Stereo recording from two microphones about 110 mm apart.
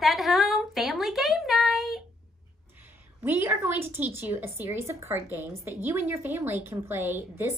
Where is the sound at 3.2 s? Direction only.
15° right (ahead or behind).